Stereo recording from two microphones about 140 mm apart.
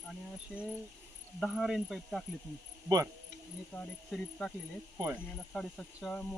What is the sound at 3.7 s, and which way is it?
Speech, 10° left (ahead or behind).